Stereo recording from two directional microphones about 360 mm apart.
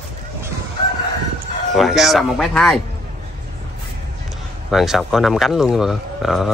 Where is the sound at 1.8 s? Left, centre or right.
Centre.